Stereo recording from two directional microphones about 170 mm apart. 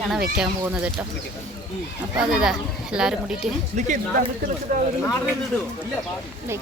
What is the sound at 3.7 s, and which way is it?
Speech, 45° right (ahead or behind).